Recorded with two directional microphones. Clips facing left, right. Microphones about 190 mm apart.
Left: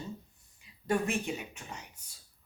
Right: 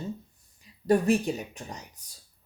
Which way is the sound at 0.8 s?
35° right (ahead or behind).